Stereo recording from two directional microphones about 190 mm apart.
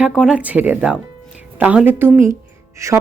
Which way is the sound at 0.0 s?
5° right (ahead or behind).